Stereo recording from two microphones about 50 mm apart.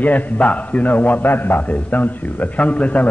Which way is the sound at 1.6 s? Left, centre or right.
Left.